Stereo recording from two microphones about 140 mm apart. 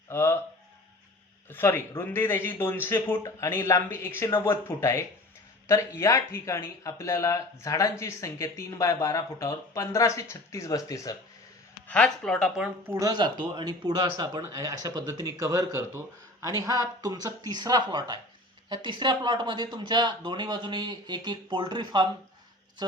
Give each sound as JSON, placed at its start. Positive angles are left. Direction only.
{"t": 0.1, "sound": "speech", "side_deg": 15}
{"t": 1.5, "sound": "speech", "side_deg": 15}
{"t": 11.9, "sound": "speech", "side_deg": 5}
{"t": 12.9, "sound": "speech", "side_deg": -25}